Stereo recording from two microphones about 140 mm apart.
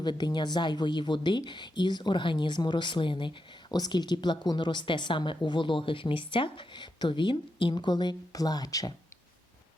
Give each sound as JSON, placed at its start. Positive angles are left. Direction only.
{"t": 0.0, "sound": "speech", "side_deg": 30}